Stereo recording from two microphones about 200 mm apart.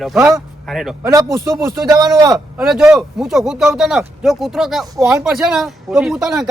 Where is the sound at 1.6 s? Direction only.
20° right (ahead or behind).